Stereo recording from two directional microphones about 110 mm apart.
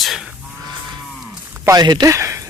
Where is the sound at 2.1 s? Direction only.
25° right (ahead or behind).